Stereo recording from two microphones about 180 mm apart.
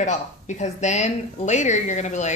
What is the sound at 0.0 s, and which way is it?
Speech, 40° left (ahead or behind).